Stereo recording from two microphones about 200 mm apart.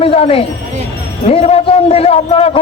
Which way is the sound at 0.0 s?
30° left (ahead or behind).